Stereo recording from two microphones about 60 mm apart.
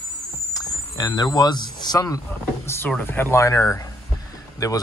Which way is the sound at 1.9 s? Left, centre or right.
Left.